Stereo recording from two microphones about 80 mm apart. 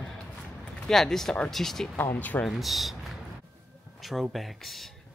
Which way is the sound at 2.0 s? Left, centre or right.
Left.